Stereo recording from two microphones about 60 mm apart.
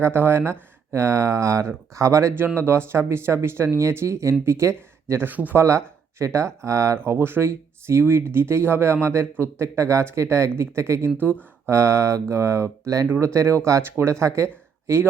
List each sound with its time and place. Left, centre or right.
0.0 s speech: right
0.9 s speech: right
2.6 s speech: right
5.2 s speech: right
5.5 s speech: right
7.0 s speech: right
13.1 s speech: right